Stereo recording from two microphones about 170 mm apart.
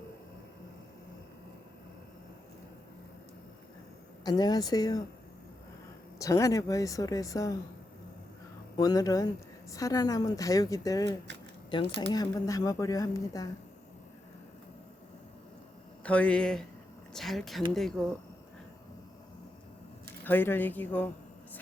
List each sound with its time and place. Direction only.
4.2 s speech: 25° left (ahead or behind)
6.1 s speech: 20° left (ahead or behind)
8.7 s speech: 20° left (ahead or behind)
16.0 s speech: 5° left (ahead or behind)
20.2 s speech: 10° left (ahead or behind)